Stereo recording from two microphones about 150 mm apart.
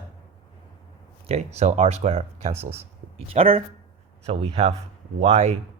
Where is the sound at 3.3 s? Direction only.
40° right (ahead or behind).